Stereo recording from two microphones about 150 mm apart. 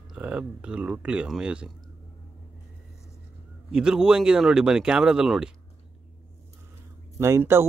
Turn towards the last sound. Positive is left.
turn(degrees=-15)  # may be behind; listen again after turning